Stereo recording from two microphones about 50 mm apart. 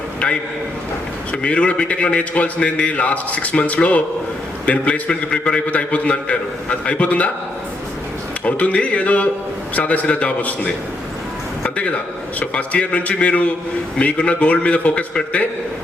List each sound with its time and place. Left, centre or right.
1.3 s a man's voice: left
8.4 s a man's voice: left